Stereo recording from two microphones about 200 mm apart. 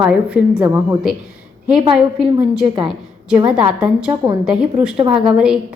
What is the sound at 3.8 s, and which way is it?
A woman's voice, 5° right (ahead or behind).